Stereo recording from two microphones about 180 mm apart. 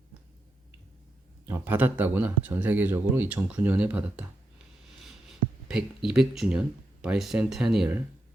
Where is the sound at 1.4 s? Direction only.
10° right (ahead or behind).